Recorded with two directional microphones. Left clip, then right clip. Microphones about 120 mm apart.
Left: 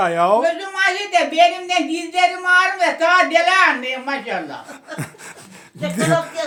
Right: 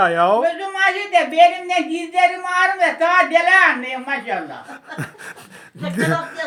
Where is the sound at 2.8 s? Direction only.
15° left (ahead or behind).